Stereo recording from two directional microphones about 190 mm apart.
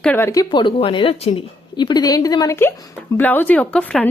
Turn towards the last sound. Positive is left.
turn(degrees=5)  # may be behind; listen again after turning